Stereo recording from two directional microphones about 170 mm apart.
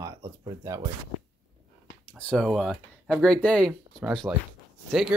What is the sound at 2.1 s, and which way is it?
Speech, 5° left (ahead or behind).